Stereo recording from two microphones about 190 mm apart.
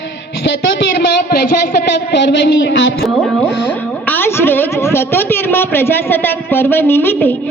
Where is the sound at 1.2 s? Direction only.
50° left (ahead or behind).